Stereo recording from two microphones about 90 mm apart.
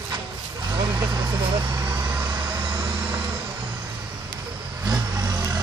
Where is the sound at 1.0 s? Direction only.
65° right (ahead or behind).